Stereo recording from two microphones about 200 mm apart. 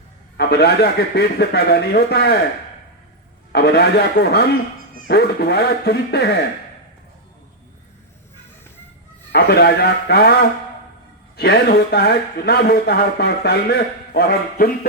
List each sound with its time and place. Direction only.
0.3 s speech: 55° left (ahead or behind)
3.5 s speech: 55° left (ahead or behind)
9.3 s speech: 50° left (ahead or behind)
11.3 s speech: 55° left (ahead or behind)